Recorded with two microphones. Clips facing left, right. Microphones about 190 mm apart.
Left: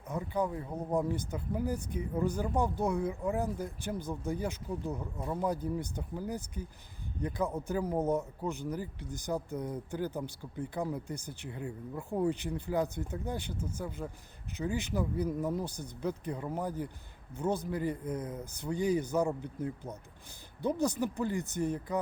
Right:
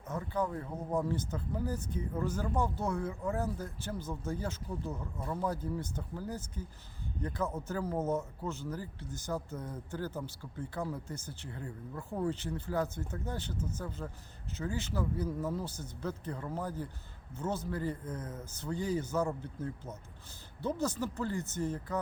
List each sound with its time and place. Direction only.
0.1 s speech: 15° left (ahead or behind)